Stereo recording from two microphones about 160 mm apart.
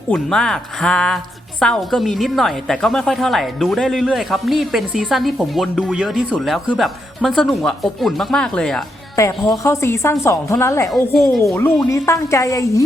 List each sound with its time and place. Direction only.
0.1 s a woman's voice: 5° left (ahead or behind)
9.1 s a woman's voice: 20° left (ahead or behind)
10.9 s a woman's voice: centre (ahead or behind)
11.8 s a woman's voice: 20° left (ahead or behind)